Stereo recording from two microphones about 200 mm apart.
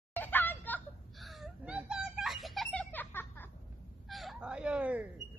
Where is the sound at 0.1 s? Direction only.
10° left (ahead or behind); by 5.0 s 5° right (ahead or behind).